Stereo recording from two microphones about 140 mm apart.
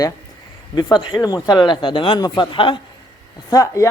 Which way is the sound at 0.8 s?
30° left (ahead or behind).